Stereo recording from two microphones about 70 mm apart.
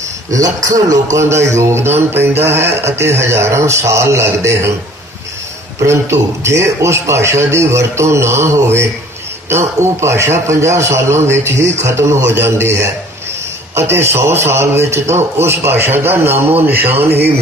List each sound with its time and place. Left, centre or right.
0.3 s a man's voice: right
5.8 s a man's voice: right